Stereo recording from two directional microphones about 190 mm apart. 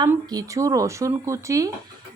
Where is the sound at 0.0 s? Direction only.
20° right (ahead or behind).